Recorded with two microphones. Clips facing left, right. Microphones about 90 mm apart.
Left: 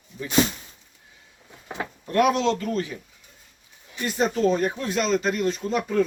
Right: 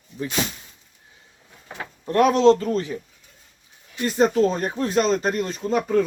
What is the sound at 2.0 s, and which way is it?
Speech, 35° right (ahead or behind).